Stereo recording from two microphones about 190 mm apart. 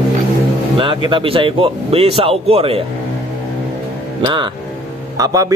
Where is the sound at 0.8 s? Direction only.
25° right (ahead or behind).